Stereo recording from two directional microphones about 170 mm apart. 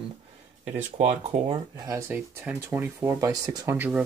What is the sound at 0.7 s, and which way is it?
Speech, 40° right (ahead or behind).